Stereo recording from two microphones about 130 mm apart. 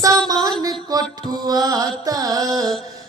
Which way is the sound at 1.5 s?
30° right (ahead or behind).